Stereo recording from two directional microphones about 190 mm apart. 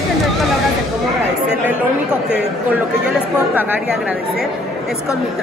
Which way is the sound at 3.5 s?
10° right (ahead or behind).